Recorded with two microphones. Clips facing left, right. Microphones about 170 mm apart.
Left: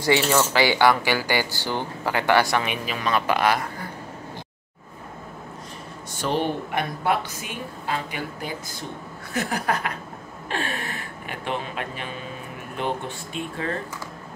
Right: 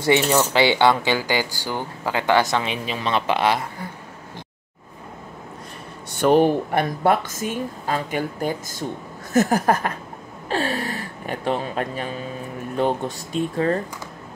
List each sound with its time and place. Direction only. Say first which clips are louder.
0.0 s speech: right 2 dB; 20° right (ahead or behind)
6.1 s speech: right 9 dB; 50° right (ahead or behind)